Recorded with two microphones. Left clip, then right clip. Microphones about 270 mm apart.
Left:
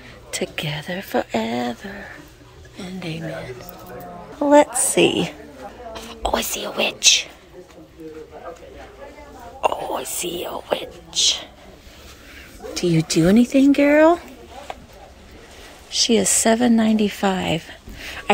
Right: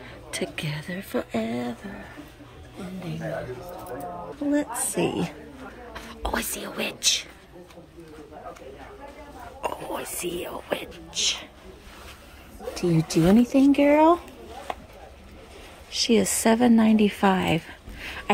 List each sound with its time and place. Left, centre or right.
0.3 s speech: centre
4.5 s speech: centre
9.6 s speech: centre
12.7 s speech: centre
13.2 s speech: right
13.5 s speech: centre
15.9 s a woman's voice: centre